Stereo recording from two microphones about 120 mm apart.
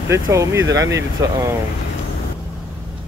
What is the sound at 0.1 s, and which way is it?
Speech, 25° right (ahead or behind).